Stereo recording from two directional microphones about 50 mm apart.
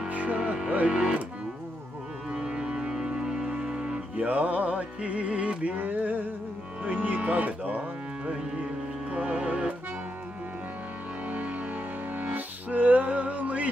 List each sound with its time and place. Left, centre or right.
0.1 s music: right
2.3 s music: centre
5.8 s speech: right
9.1 s music: right
11.2 s music: right